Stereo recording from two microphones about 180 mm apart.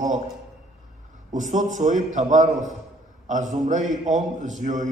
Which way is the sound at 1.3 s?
45° right (ahead or behind).